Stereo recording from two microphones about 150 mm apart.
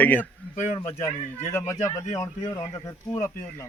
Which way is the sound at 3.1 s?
15° left (ahead or behind).